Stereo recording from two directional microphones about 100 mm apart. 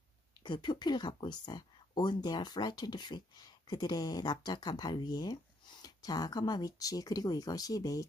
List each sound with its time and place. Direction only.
0.4 s speech: 50° left (ahead or behind)